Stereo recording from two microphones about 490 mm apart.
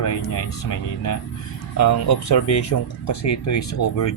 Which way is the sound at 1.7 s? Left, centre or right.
Left.